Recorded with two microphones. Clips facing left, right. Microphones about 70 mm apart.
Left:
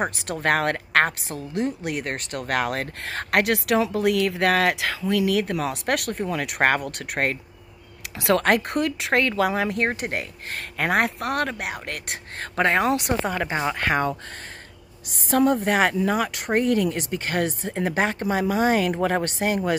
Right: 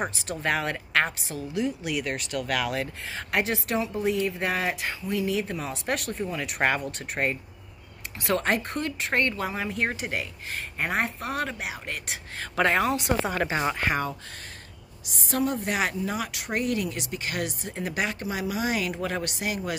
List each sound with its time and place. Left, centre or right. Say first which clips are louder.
0.0 s a woman's voice: left 4 dB; left
8.2 s speech: left 6 dB; left
9.8 s a woman's voice: left 4 dB; left
13.7 s speech: left 4 dB; left